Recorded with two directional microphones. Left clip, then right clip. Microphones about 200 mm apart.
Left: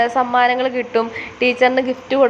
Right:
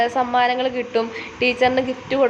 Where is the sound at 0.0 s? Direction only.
10° left (ahead or behind).